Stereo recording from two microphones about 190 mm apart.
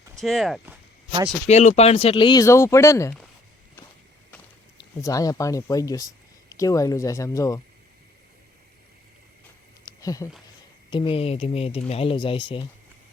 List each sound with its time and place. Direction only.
0.2 s speech: centre (ahead or behind)
1.5 s speech: 35° left (ahead or behind); by 3.2 s 15° left (ahead or behind)
4.8 s speech: 15° left (ahead or behind)
9.8 s a sound: 20° left (ahead or behind)
10.9 s speech: 30° left (ahead or behind)